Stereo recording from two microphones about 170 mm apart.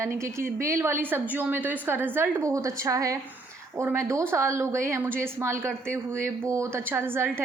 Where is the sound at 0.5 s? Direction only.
15° right (ahead or behind).